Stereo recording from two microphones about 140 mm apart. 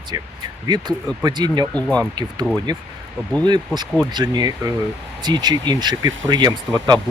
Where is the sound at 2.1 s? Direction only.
30° right (ahead or behind).